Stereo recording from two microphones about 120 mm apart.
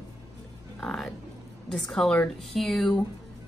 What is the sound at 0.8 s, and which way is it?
Speech, 5° left (ahead or behind).